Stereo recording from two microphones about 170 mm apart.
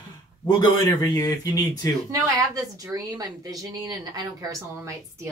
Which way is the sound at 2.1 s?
20° right (ahead or behind).